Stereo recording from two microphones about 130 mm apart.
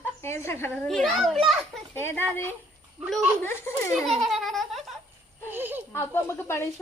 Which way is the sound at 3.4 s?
15° left (ahead or behind).